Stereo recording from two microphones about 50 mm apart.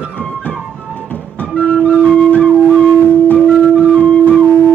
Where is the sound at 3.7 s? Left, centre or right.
Left.